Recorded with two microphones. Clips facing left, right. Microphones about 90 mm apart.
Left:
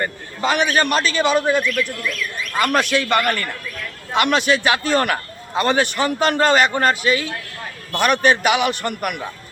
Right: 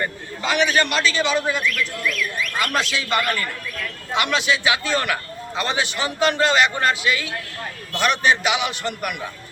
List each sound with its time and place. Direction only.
0.0 s a man's voice: 40° left (ahead or behind)
7.9 s a man's voice: 50° left (ahead or behind)